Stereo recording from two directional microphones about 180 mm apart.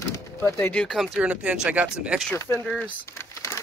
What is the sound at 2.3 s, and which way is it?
Speech, 15° left (ahead or behind).